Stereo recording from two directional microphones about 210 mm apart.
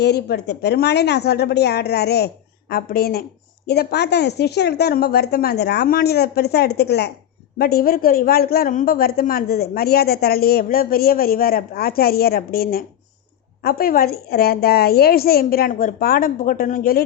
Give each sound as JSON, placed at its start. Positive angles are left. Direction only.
{"t": 0.0, "sound": "a woman's voice", "side_deg": 50}